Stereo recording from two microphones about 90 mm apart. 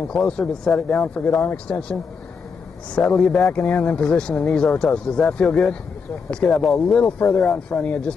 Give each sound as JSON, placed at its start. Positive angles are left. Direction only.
{"t": 0.1, "sound": "speech", "side_deg": 5}
{"t": 3.5, "sound": "speech", "side_deg": 15}